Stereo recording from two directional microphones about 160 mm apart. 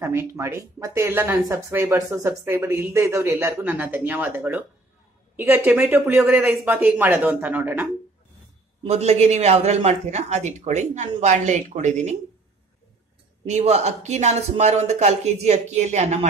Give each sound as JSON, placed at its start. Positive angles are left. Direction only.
{"t": 0.0, "sound": "speech", "side_deg": -15}
{"t": 8.8, "sound": "speech", "side_deg": -40}
{"t": 13.5, "sound": "speech", "side_deg": -45}